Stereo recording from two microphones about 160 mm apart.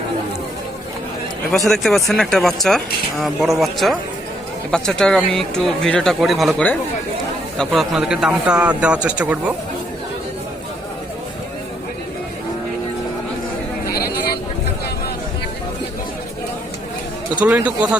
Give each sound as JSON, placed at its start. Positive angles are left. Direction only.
{"t": 1.5, "sound": "speech", "side_deg": 0}
{"t": 13.8, "sound": "a sound", "side_deg": 75}
{"t": 17.4, "sound": "speech", "side_deg": -10}